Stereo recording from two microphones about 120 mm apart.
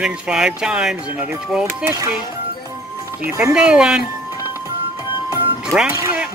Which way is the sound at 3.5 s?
5° right (ahead or behind).